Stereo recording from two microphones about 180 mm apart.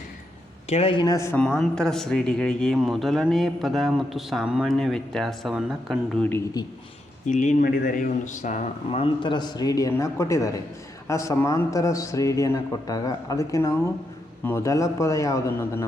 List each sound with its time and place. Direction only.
0.7 s a man's voice: 30° left (ahead or behind)
1.4 s a man's voice: 5° left (ahead or behind)
7.3 s speech: 45° left (ahead or behind); by 15.9 s 15° left (ahead or behind)